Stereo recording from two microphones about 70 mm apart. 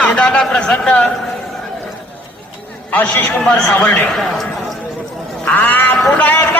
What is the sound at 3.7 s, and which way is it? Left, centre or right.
Speech, left.